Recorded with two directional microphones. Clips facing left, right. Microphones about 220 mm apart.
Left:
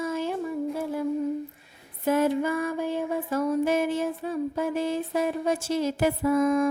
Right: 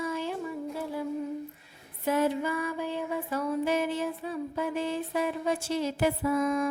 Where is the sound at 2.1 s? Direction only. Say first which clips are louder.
Left 4 dB; 50° left (ahead or behind).